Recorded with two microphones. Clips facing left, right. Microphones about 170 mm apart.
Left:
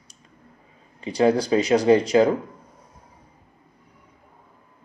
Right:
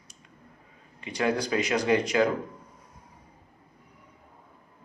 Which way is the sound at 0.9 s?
35° left (ahead or behind).